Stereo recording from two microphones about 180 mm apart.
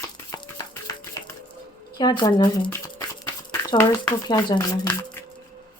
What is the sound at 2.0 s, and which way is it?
A woman's voice, 25° left (ahead or behind).